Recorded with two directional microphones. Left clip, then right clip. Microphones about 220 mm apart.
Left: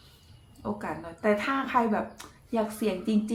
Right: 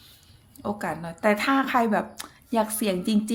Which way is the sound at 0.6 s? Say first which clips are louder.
Right 4 dB; 45° right (ahead or behind).